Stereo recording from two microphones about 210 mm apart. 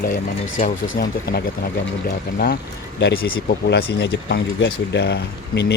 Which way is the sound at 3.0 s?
45° left (ahead or behind).